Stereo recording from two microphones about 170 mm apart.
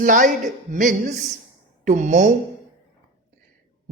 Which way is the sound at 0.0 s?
50° right (ahead or behind).